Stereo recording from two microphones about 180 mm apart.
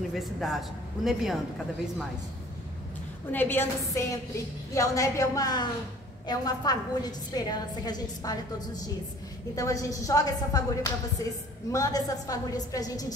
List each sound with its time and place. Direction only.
0.1 s speech: centre (ahead or behind)
3.3 s a woman's voice: 10° left (ahead or behind)